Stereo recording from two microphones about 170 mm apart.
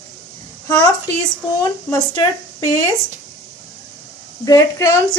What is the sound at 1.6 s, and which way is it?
Speech, 20° left (ahead or behind).